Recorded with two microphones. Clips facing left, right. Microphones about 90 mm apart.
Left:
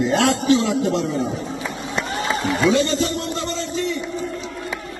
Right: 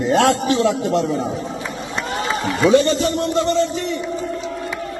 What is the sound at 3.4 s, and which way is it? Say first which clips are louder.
Speech: right 5 dB; 50° right (ahead or behind).